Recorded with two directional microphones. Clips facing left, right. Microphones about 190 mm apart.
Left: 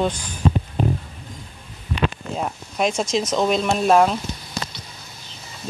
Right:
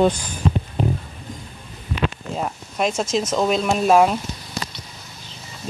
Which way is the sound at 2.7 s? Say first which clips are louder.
Even; 5° right (ahead or behind).